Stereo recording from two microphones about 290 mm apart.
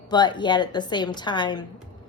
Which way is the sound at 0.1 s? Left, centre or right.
Centre.